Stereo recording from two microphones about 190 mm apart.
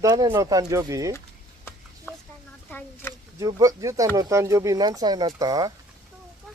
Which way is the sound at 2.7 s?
10° left (ahead or behind).